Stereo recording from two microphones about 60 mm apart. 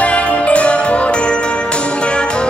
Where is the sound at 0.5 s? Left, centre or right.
Left.